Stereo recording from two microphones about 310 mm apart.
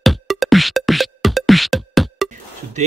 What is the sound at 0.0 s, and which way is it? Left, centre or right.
Music, centre.